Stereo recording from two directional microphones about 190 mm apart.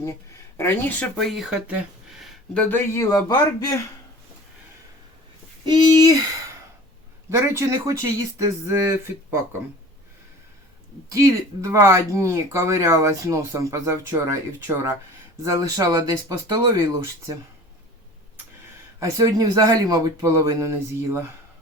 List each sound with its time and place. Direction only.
0.0 s speech: 15° left (ahead or behind)
5.6 s speech: 20° right (ahead or behind)
11.1 s speech: 15° right (ahead or behind)
18.9 s speech: 15° right (ahead or behind)